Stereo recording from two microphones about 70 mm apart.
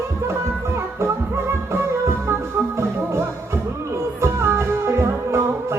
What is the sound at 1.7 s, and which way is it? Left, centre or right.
Music, right.